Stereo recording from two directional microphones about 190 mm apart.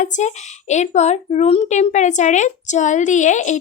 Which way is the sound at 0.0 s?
40° left (ahead or behind).